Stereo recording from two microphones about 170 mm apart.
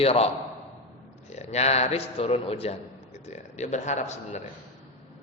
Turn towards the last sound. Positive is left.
turn(degrees=40)  # may be behind; listen again after turning